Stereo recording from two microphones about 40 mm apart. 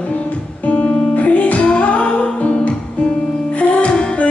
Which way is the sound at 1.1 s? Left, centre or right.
Left.